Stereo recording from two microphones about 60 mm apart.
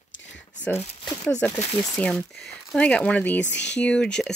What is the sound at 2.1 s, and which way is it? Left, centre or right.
Speech, centre.